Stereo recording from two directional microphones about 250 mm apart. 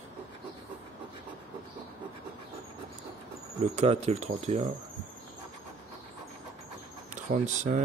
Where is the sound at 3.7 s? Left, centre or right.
Right.